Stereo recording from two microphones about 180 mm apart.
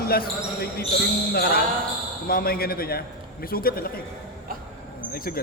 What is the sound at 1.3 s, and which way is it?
A man's voice, 60° left (ahead or behind).